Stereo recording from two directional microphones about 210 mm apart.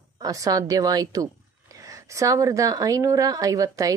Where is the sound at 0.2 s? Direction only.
15° right (ahead or behind).